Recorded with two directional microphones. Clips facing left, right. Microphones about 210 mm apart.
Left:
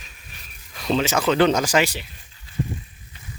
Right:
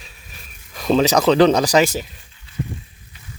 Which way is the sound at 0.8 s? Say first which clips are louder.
Right 6 dB; 40° right (ahead or behind).